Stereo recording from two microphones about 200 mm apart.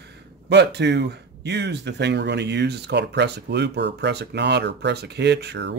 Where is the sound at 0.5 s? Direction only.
60° right (ahead or behind).